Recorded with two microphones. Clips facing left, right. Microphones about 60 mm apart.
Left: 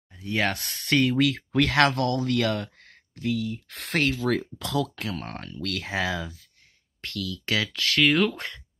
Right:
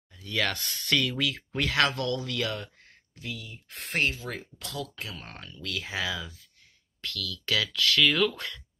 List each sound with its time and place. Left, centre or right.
0.2 s speech: left
1.1 s speech: left
4.9 s speech: left
7.0 s speech: left